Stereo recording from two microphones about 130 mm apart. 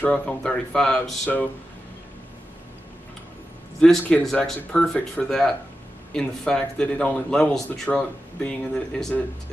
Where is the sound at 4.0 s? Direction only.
5° left (ahead or behind).